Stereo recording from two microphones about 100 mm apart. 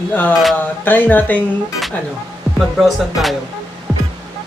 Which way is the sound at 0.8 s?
20° left (ahead or behind).